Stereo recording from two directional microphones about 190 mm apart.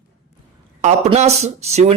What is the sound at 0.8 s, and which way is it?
A man's voice, 35° right (ahead or behind).